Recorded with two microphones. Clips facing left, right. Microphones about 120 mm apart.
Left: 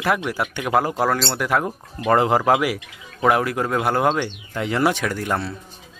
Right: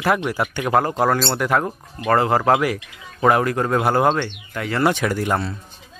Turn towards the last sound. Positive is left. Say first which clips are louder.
# right 3 dB
turn(degrees=-5)  # may be behind; listen again after turning